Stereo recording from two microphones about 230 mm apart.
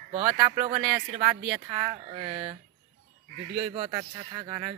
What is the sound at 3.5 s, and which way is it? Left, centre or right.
A man's voice, right.